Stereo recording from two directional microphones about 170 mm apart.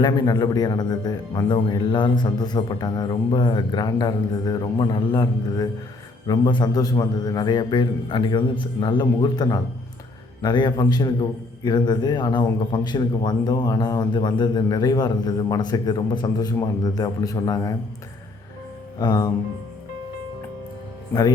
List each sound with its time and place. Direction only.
0.0 s a man's voice: 25° left (ahead or behind)
18.9 s a man's voice: 25° left (ahead or behind)
21.1 s speech: 25° left (ahead or behind)